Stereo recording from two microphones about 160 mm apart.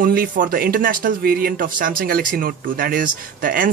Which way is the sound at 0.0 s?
65° right (ahead or behind).